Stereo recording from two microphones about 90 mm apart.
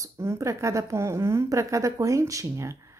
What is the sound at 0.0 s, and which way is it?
A woman's voice, 35° right (ahead or behind).